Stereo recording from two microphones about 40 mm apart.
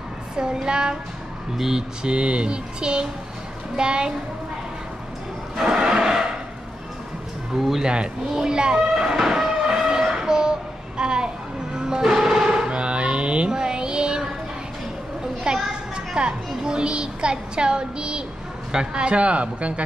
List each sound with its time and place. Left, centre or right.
0.4 s music: right
5.6 s a sound: centre
7.5 s speech: centre
7.8 s a child's voice: right
9.6 s music: centre
10.1 s a sound: centre
11.0 s music: right
15.5 s children playing: right
16.2 s a woman's voice: right
18.7 s music: right